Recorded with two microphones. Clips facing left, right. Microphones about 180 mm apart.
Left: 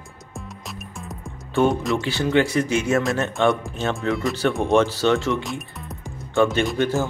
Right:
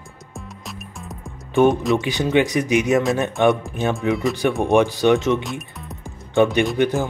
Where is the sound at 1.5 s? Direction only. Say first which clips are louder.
Right 4 dB; 20° right (ahead or behind).